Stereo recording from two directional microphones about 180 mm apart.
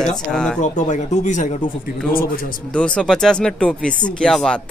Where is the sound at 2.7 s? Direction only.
5° left (ahead or behind).